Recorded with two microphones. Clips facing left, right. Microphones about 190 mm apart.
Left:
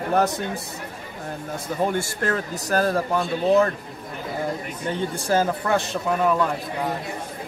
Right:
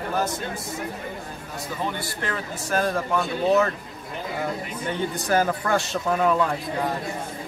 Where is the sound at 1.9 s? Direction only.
45° left (ahead or behind).